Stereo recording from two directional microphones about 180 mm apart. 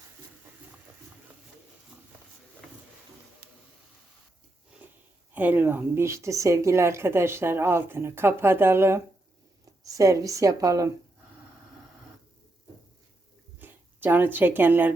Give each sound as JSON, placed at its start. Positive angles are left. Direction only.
{"t": 5.3, "sound": "speech", "side_deg": -10}
{"t": 13.6, "sound": "speech", "side_deg": -10}